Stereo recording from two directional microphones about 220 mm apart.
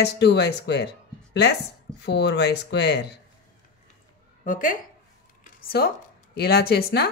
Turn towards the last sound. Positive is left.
turn(degrees=45)  # may be behind; listen again after turning